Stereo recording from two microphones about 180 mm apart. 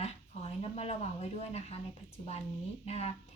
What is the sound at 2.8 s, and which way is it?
Speech, 35° left (ahead or behind).